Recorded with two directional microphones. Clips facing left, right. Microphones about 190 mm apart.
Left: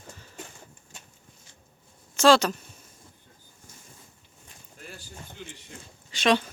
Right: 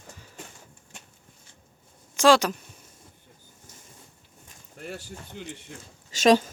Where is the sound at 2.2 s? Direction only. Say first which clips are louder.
Even; 15° right (ahead or behind).